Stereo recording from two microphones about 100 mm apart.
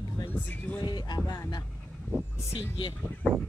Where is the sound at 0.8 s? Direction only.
45° left (ahead or behind).